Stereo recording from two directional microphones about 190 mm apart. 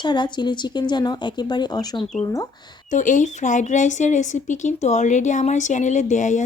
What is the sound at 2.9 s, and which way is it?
Speech, 40° left (ahead or behind).